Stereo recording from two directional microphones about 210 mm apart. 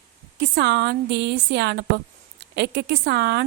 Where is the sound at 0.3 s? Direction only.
55° right (ahead or behind).